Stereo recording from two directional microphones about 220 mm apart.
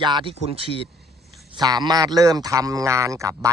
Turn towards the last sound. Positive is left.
turn(degrees=-15)  # may be behind; listen again after turning